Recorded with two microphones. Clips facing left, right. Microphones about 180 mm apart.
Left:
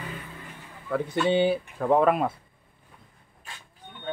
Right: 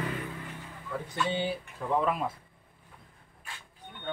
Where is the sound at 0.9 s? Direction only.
65° left (ahead or behind).